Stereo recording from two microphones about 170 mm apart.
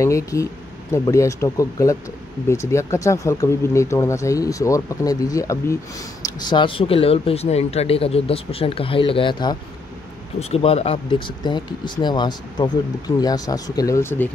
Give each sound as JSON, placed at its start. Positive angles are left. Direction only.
{"t": 0.0, "sound": "speech", "side_deg": 20}
{"t": 6.2, "sound": "speech", "side_deg": 30}